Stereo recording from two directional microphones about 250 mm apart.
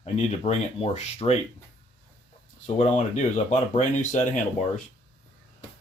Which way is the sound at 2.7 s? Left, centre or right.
Left.